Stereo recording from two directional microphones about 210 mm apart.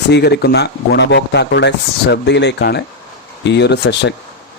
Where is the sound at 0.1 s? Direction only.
50° left (ahead or behind).